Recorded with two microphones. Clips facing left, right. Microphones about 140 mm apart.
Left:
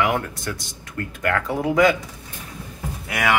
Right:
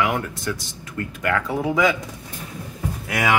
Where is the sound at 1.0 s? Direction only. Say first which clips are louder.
Right 1 dB; 20° right (ahead or behind).